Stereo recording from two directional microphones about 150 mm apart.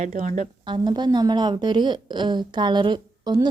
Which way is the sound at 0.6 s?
30° right (ahead or behind).